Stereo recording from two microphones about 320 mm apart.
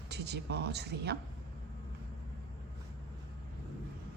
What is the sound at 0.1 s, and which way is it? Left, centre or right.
A woman's voice, right.